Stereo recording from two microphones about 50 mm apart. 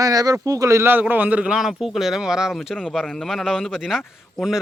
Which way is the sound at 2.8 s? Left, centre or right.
Centre.